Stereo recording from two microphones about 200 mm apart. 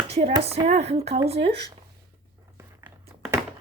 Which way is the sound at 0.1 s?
30° right (ahead or behind).